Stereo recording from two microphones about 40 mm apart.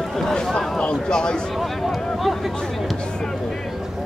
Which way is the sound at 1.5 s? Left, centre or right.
Centre.